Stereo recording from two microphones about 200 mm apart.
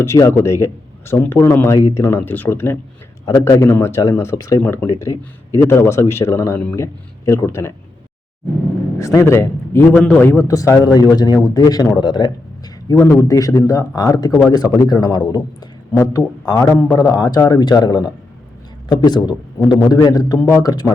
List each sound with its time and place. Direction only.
0.0 s a man's voice: 15° left (ahead or behind)
9.0 s a man's voice: 15° left (ahead or behind)